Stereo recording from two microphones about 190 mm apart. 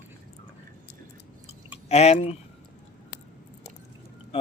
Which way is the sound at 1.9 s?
35° left (ahead or behind).